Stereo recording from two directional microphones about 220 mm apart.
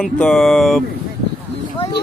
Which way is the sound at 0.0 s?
5° left (ahead or behind).